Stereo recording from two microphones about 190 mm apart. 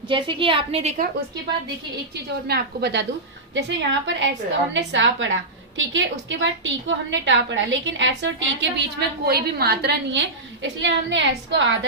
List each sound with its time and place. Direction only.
0.1 s a woman's voice: 25° right (ahead or behind)
2.5 s a woman's voice: 60° right (ahead or behind)
3.5 s a woman's voice: 75° right (ahead or behind)